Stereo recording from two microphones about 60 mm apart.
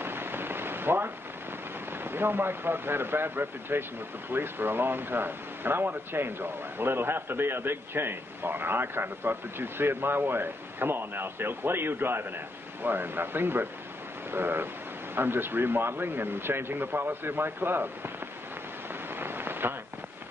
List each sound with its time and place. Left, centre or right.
0.0 s rain: right
2.0 s speech: right
19.1 s rain on surface: right